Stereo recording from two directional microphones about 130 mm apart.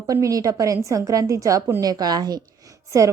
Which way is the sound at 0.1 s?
25° right (ahead or behind).